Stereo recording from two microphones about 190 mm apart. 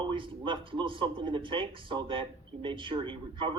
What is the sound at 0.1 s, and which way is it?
Speech, 25° right (ahead or behind).